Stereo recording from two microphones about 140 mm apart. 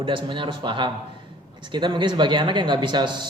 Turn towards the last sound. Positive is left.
turn(degrees=-35)  # may be behind; listen again after turning